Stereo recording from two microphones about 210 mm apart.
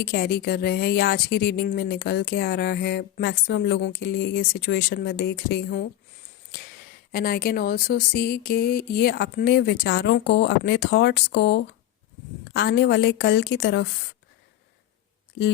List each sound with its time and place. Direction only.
0.0 s speech: 45° left (ahead or behind)
7.1 s speech: 45° left (ahead or behind)